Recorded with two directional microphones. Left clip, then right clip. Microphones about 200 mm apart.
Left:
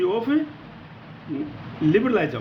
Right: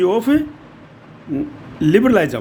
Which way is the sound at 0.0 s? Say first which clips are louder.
Right 7 dB; 65° right (ahead or behind).